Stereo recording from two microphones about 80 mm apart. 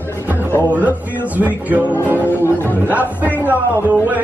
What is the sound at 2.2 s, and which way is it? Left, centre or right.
Music, left.